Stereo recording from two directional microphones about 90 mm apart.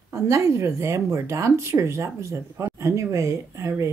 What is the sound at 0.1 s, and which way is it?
Speech, 35° right (ahead or behind).